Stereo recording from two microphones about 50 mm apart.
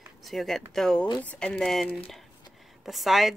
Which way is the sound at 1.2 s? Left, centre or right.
Left.